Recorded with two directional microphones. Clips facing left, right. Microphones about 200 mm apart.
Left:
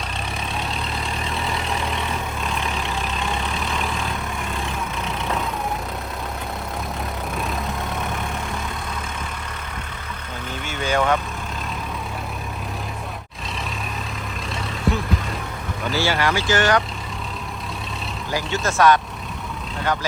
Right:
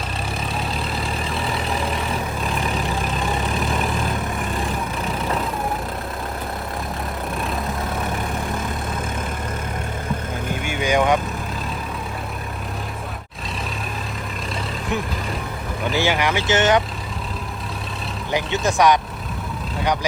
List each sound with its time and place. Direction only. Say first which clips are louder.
0.9 s vehicle: right 2 dB; centre (ahead or behind)
10.5 s vehicle: right 3 dB; 15° right (ahead or behind)
15.9 s vehicle: right 1 dB; 15° right (ahead or behind)
18.3 s speech: right 3 dB; 20° right (ahead or behind)